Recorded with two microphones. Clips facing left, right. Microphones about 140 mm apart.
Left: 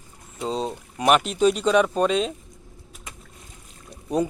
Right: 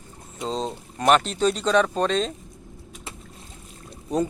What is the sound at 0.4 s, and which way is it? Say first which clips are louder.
Speech: left 1 dB; 10° left (ahead or behind).